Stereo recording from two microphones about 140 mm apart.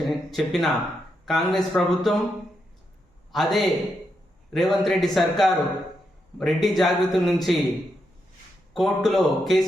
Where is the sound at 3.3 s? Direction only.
Centre (ahead or behind).